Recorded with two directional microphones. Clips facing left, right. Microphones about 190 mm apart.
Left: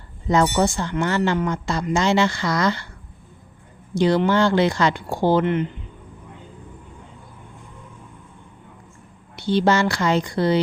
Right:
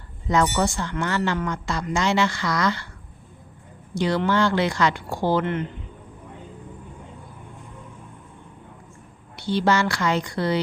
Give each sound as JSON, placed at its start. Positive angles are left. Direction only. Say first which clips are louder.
{"t": 0.3, "sound": "speech", "louder": "left 3 dB", "side_deg": 30}
{"t": 3.9, "sound": "speech", "louder": "left 4 dB", "side_deg": 25}
{"t": 9.3, "sound": "speech", "louder": "left 3 dB", "side_deg": 25}